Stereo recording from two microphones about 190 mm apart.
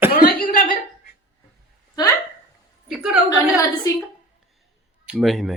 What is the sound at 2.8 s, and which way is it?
Speech, 5° right (ahead or behind).